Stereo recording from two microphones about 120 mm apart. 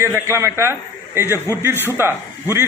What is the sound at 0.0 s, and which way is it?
A man's voice, 20° right (ahead or behind).